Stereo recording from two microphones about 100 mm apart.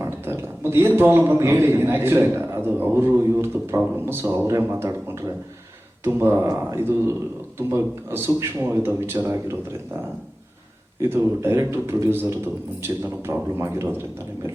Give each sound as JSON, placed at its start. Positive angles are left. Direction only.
{"t": 0.0, "sound": "a man's voice", "side_deg": -25}
{"t": 6.1, "sound": "a man's voice", "side_deg": -25}
{"t": 11.1, "sound": "a man's voice", "side_deg": -25}